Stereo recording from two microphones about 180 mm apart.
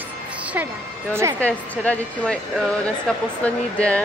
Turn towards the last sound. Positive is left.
turn(degrees=5)  # may be behind; listen again after turning